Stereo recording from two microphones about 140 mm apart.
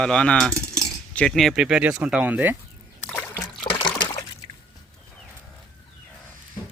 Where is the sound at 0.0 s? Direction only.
5° left (ahead or behind); by 2.6 s 10° right (ahead or behind).